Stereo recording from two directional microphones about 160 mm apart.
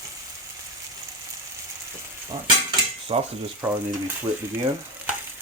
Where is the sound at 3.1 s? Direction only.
35° right (ahead or behind).